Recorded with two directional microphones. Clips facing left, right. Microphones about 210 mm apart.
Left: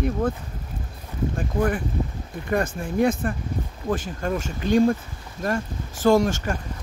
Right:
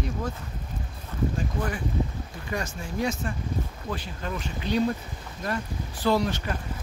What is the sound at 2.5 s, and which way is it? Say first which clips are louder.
Speech: left 8 dB; 55° left (ahead or behind).